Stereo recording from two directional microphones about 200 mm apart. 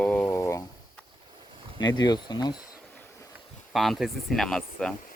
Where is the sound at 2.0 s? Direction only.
20° left (ahead or behind).